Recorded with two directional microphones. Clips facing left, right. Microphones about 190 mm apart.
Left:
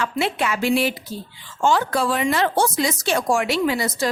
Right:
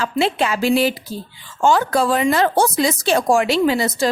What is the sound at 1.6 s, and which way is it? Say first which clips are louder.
A woman's voice: right 3 dB; 45° right (ahead or behind).